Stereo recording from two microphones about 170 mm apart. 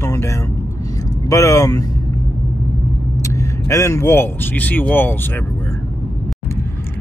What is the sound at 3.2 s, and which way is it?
Speech, 20° left (ahead or behind).